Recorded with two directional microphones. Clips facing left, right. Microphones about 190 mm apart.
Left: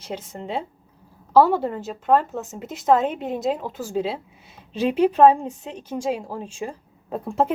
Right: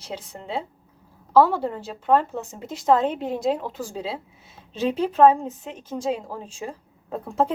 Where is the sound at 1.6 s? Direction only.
5° left (ahead or behind).